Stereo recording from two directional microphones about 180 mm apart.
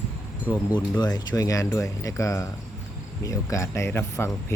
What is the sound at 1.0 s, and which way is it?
Speech, 20° left (ahead or behind).